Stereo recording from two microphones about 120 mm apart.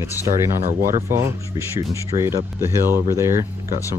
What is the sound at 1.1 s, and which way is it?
Speech, 25° right (ahead or behind).